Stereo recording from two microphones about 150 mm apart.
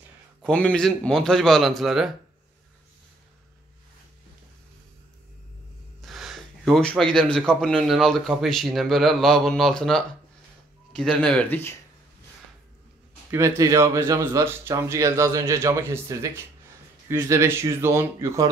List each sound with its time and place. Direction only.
0.4 s speech: 5° left (ahead or behind)
5.9 s speech: centre (ahead or behind)
13.3 s speech: 20° right (ahead or behind)